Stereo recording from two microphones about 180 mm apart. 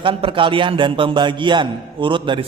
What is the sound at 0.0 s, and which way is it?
A man's voice, 30° right (ahead or behind).